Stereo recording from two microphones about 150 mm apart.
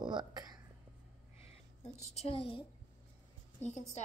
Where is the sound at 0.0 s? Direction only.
30° right (ahead or behind).